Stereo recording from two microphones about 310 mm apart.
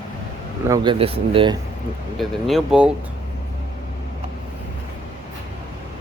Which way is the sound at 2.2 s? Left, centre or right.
Centre.